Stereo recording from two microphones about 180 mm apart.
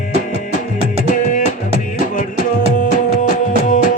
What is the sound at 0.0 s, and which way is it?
Music, 45° left (ahead or behind).